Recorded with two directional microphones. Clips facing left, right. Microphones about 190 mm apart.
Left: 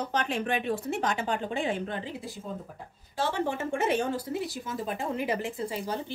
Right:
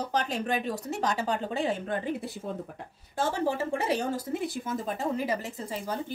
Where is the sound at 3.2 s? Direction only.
40° right (ahead or behind).